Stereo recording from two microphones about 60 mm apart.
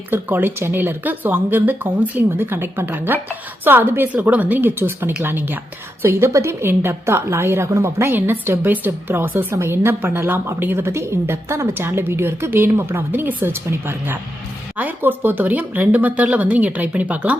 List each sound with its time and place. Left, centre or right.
0.1 s a woman's voice: right
4.1 s speech: right
4.6 s a woman's voice: right
6.0 s a woman's voice: right
8.1 s a woman's voice: right